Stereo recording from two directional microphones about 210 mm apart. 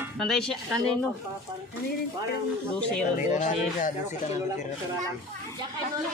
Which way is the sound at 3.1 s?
35° left (ahead or behind).